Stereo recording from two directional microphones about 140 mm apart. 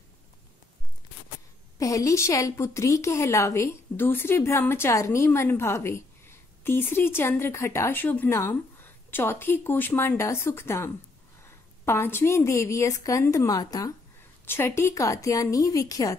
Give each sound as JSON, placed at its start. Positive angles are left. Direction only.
{"t": 1.8, "sound": "a woman's voice", "side_deg": 25}